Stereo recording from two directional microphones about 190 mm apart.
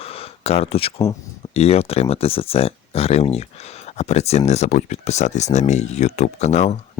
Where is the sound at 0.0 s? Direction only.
30° left (ahead or behind).